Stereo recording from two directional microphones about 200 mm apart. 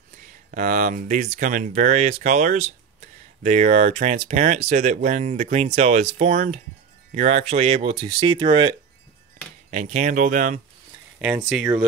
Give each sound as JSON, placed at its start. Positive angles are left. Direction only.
{"t": 0.5, "sound": "speech", "side_deg": -40}
{"t": 9.7, "sound": "speech", "side_deg": -35}
{"t": 11.1, "sound": "speech", "side_deg": -5}